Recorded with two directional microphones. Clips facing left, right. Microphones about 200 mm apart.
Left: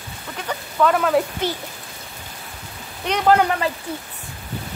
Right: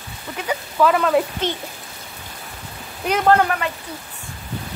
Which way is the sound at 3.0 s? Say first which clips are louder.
Right 1 dB; 5° right (ahead or behind).